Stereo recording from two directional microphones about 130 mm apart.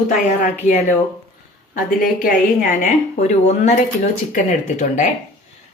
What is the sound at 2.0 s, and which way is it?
A woman's voice, 90° left.